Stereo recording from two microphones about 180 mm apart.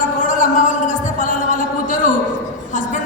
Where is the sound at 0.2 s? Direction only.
45° left (ahead or behind).